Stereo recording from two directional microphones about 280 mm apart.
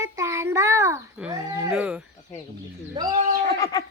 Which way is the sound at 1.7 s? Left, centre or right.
Centre.